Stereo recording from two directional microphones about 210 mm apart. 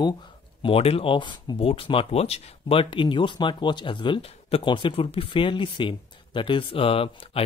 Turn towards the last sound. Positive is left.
turn(degrees=25)  # may be behind; listen again after turning